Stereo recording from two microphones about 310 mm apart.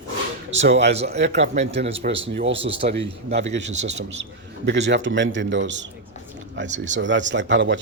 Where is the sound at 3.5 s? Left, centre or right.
Right.